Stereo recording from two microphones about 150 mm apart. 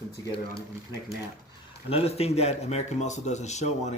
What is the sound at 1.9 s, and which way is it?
A man's voice, 45° left (ahead or behind).